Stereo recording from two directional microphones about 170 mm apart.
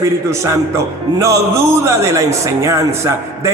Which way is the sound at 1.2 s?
15° right (ahead or behind).